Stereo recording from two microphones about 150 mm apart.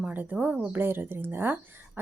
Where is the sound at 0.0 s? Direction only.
10° right (ahead or behind).